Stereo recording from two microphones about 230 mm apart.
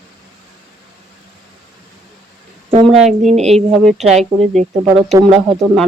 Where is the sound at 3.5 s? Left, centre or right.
Centre.